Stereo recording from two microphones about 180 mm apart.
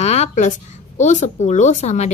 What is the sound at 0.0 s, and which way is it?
A woman's voice, 40° left (ahead or behind).